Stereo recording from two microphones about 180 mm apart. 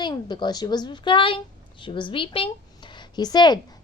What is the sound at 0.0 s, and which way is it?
A woman's voice, 25° left (ahead or behind).